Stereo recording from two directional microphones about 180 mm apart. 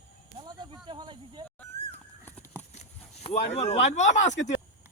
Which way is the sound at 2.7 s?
40° left (ahead or behind).